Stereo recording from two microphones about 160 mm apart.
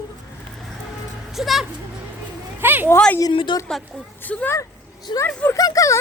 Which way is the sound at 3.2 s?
30° left (ahead or behind).